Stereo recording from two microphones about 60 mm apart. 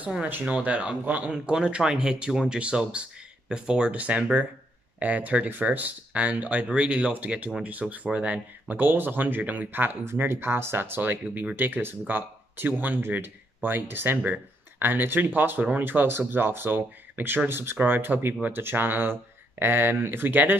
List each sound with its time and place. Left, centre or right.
0.0 s speech: right
1.3 s speech: centre; by 20.5 s right